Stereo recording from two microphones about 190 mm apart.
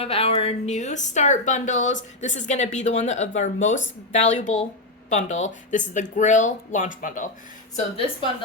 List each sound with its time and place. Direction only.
0.0 s speech: 30° left (ahead or behind)